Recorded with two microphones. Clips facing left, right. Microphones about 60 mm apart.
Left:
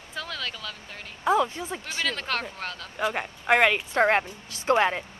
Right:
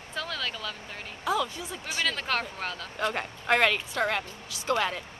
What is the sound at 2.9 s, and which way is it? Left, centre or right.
Speech, centre.